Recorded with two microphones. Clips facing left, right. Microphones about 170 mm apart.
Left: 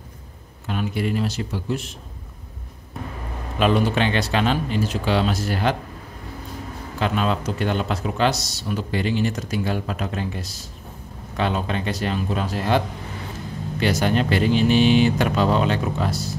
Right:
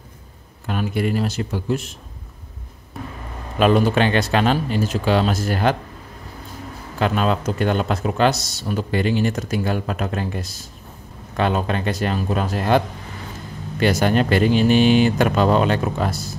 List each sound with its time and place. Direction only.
0.7 s speech: 55° right (ahead or behind)
3.5 s speech: 50° right (ahead or behind)
7.0 s speech: 50° right (ahead or behind)